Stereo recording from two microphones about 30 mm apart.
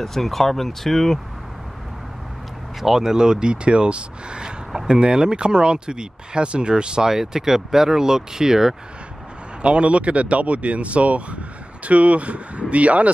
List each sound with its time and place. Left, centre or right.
0.0 s speech: centre
2.8 s speech: centre
7.1 s speech: centre
9.6 s speech: right